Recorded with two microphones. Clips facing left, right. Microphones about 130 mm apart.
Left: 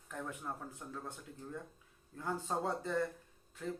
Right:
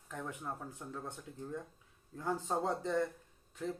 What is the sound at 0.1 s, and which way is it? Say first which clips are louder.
Speech: right 1 dB; 10° right (ahead or behind).